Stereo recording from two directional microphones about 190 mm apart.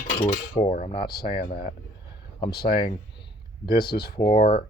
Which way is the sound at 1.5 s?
55° left (ahead or behind).